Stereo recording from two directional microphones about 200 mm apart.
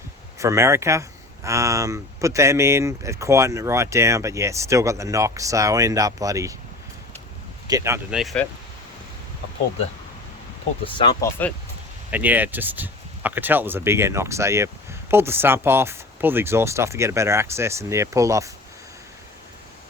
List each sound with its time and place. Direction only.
0.3 s speech: 15° right (ahead or behind)
7.7 s speech: 15° right (ahead or behind)
8.1 s speech: centre (ahead or behind)
10.9 s speech: 20° left (ahead or behind)
12.1 s speech: 10° right (ahead or behind)